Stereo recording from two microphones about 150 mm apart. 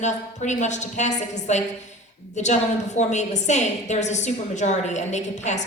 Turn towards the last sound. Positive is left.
turn(degrees=50)  # may be behind; listen again after turning